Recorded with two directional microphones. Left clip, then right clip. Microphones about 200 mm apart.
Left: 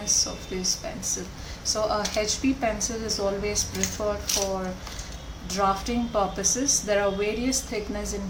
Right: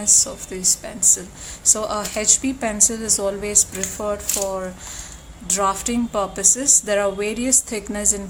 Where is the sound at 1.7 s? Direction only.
50° right (ahead or behind).